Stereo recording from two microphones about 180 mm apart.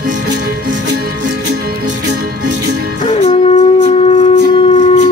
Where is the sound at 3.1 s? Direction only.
35° left (ahead or behind).